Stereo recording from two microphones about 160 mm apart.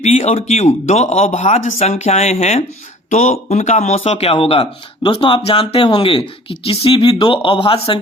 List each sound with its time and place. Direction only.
0.0 s speech: 40° left (ahead or behind)